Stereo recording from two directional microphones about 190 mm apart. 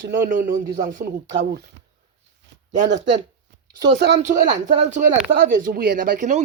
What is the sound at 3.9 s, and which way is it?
Speech, 70° right (ahead or behind).